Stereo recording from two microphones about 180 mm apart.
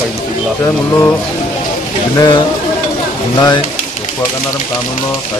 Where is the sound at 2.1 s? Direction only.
20° left (ahead or behind).